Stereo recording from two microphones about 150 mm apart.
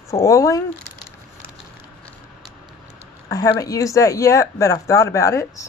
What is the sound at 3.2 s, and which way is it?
Speech, 25° left (ahead or behind).